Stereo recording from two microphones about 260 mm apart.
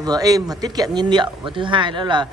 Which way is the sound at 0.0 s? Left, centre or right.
Centre.